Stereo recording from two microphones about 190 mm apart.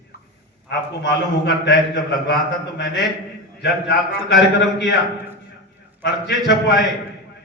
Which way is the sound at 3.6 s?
60° left (ahead or behind).